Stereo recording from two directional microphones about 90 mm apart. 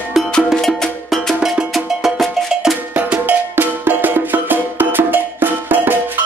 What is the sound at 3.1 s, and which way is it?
Music, 20° right (ahead or behind).